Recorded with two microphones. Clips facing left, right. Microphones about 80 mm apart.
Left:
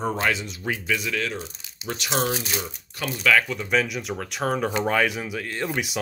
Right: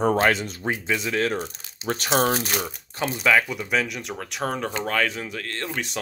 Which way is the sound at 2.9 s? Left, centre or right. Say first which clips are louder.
Right 1 dB; right.